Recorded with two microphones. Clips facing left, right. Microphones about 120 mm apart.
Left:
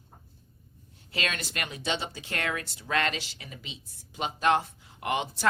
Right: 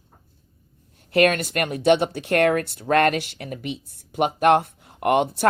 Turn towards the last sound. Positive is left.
turn(degrees=-55)  # may be behind; listen again after turning